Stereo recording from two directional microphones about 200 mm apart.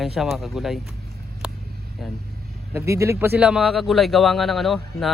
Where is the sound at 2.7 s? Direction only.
15° right (ahead or behind).